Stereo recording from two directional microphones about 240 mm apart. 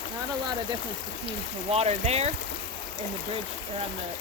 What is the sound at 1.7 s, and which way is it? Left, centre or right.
Speech, right.